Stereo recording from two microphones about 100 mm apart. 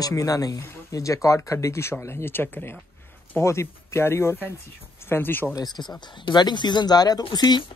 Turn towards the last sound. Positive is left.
turn(degrees=45)  # may be behind; listen again after turning